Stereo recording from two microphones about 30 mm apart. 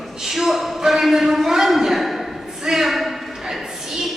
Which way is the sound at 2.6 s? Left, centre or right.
Centre.